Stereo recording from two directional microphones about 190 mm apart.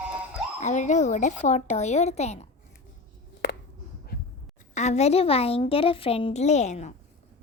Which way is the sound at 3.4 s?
65° left (ahead or behind).